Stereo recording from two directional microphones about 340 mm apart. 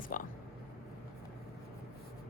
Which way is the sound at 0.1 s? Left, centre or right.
Left.